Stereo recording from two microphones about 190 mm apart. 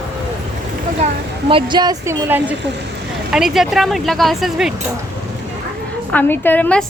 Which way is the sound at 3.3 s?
Centre (ahead or behind).